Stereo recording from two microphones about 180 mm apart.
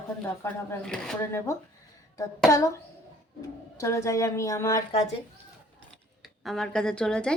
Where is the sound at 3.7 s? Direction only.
15° left (ahead or behind).